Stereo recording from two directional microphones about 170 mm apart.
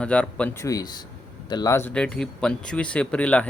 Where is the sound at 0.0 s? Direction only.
5° left (ahead or behind).